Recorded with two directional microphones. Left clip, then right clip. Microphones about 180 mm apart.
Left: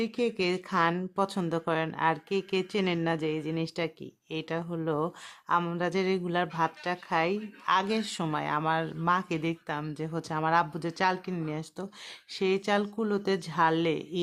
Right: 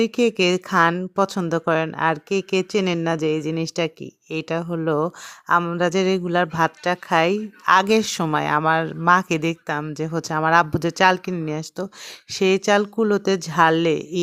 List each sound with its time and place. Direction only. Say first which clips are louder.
0.0 s a woman's voice: right 10 dB; 40° right (ahead or behind)